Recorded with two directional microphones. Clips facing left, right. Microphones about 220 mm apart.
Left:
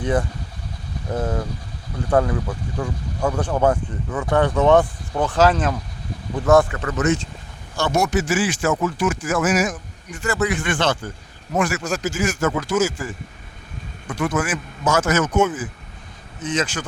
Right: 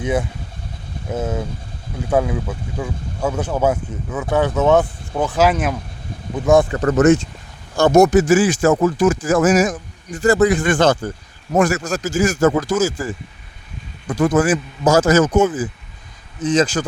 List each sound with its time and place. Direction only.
0.0 s speech: 10° right (ahead or behind)
6.7 s speech: 40° right (ahead or behind)
14.1 s speech: 35° right (ahead or behind)